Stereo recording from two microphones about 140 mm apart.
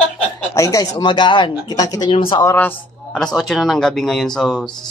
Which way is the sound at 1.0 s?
35° left (ahead or behind).